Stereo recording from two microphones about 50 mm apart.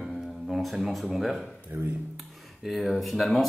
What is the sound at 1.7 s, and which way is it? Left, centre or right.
Speech, right.